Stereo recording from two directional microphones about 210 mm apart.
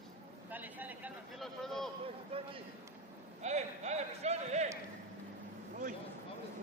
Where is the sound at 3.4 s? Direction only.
30° right (ahead or behind).